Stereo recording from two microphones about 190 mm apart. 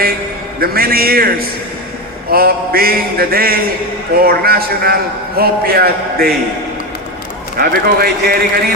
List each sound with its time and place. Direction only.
0.6 s a man's voice: 50° right (ahead or behind)
7.6 s a man's voice: 55° right (ahead or behind)